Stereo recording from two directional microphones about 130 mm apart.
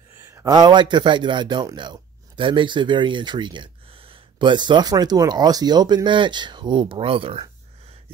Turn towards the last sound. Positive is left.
turn(degrees=-45)  # may be behind; listen again after turning